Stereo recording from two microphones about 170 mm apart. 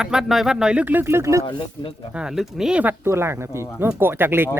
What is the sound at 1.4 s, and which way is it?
Speech, 30° left (ahead or behind).